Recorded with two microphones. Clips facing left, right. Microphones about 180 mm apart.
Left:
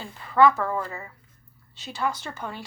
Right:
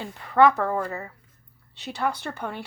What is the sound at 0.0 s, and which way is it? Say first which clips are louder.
A woman's voice: right 1 dB; 60° right (ahead or behind).